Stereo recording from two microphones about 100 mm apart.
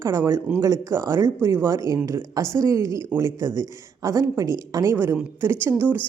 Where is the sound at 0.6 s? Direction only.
30° right (ahead or behind).